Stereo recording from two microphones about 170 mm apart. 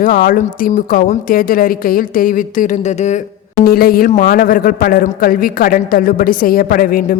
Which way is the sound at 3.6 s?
60° left (ahead or behind).